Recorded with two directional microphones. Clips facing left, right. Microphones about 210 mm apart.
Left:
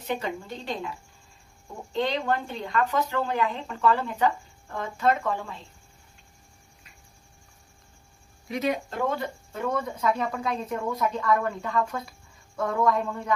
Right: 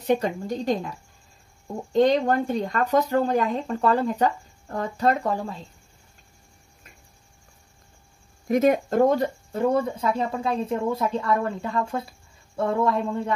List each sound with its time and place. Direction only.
0.0 s speech: 40° right (ahead or behind)
8.5 s speech: 50° right (ahead or behind); by 13.3 s 25° right (ahead or behind)